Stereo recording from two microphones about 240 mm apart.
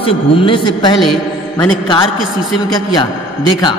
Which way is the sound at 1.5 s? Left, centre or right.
Centre.